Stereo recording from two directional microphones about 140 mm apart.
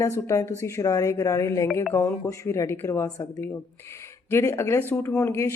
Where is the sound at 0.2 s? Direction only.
20° left (ahead or behind).